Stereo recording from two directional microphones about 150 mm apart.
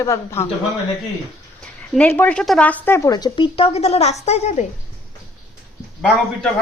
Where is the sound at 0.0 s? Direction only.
20° left (ahead or behind).